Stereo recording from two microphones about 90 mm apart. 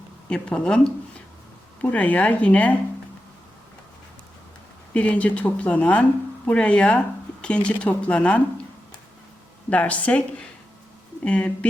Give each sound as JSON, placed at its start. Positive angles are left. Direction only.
{"t": 0.3, "sound": "speech", "side_deg": 10}
{"t": 1.8, "sound": "speech", "side_deg": 15}
{"t": 4.9, "sound": "speech", "side_deg": 15}
{"t": 9.6, "sound": "speech", "side_deg": 15}